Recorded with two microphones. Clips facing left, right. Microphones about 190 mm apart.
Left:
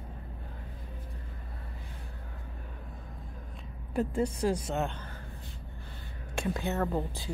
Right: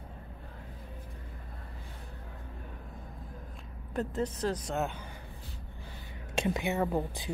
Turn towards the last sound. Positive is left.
turn(degrees=-15)  # may be behind; listen again after turning